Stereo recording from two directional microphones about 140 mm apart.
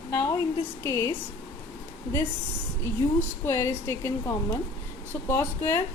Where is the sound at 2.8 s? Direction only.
20° left (ahead or behind).